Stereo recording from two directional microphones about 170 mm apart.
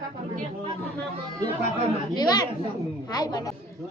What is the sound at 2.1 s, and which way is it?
A woman's voice, 25° left (ahead or behind).